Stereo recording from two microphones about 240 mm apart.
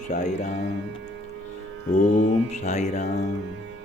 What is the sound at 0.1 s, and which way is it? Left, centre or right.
Mantra, left.